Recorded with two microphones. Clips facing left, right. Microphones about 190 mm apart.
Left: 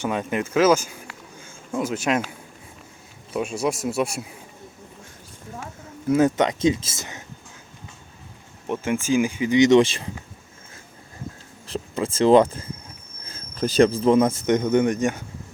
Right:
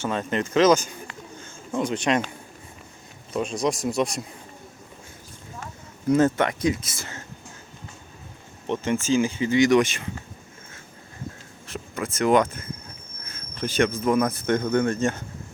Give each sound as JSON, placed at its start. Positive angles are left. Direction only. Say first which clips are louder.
{"t": 0.0, "sound": "speech", "louder": "left 1 dB", "side_deg": 10}
{"t": 3.3, "sound": "speech", "louder": "even", "side_deg": 10}
{"t": 6.1, "sound": "speech", "louder": "left 1 dB", "side_deg": 10}
{"t": 8.6, "sound": "speech", "louder": "even", "side_deg": 10}
{"t": 11.7, "sound": "speech", "louder": "left 5 dB", "side_deg": 30}